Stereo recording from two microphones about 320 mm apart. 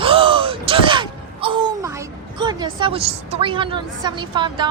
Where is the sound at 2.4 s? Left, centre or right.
Centre.